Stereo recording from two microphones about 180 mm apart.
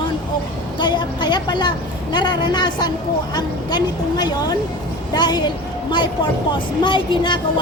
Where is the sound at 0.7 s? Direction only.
25° left (ahead or behind).